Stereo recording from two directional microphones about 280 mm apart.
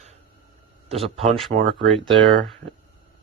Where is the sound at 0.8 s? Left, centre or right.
Right.